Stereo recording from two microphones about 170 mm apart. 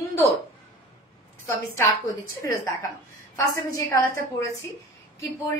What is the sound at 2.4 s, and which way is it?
A woman's voice, 15° left (ahead or behind).